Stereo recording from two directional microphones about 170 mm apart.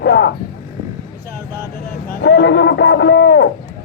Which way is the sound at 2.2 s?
90° left.